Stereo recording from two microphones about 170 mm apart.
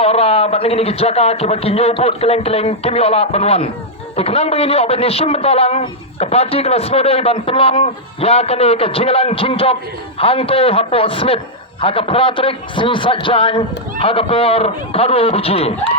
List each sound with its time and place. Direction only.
0.0 s a man's voice: 35° left (ahead or behind)